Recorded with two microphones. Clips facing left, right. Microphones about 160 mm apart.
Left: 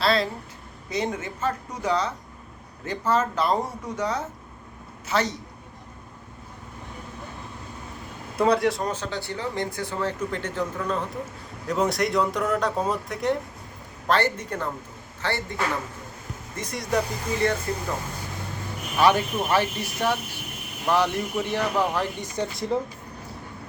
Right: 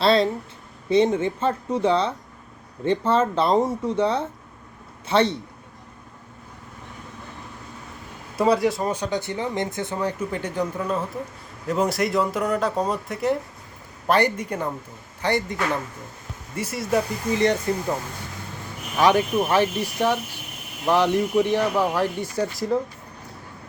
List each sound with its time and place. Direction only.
0.0 s a man's voice: 30° right (ahead or behind)
8.4 s speech: centre (ahead or behind)
8.9 s speech: 15° right (ahead or behind)
14.1 s speech: 15° right (ahead or behind)
16.6 s speech: 5° right (ahead or behind)
17.4 s speech: 20° right (ahead or behind)
18.9 s speech: 15° right (ahead or behind)